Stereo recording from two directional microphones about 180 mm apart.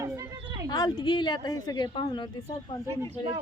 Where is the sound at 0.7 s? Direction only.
25° left (ahead or behind).